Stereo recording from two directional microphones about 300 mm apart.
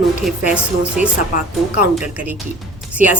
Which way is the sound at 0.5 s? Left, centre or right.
Centre.